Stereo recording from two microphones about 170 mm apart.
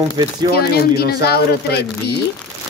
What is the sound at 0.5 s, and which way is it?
Speech, 65° left (ahead or behind).